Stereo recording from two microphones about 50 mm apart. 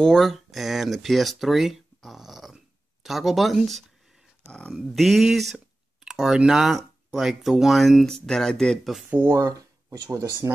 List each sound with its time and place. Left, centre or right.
0.0 s speech: centre
2.0 s a sound: centre
3.0 s speech: centre
4.5 s speech: left
4.7 s speech: centre
8.0 s speech: centre
9.8 s speech: right